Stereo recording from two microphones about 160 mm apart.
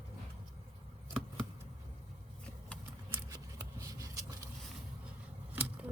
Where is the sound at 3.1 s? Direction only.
20° right (ahead or behind).